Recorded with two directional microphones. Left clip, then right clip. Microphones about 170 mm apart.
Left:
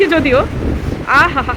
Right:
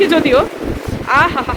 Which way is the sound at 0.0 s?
25° right (ahead or behind).